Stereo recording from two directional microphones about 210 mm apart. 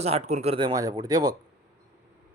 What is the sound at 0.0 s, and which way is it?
Speech, 30° right (ahead or behind).